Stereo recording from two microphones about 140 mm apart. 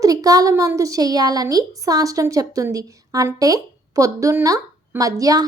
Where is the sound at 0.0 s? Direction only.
25° right (ahead or behind).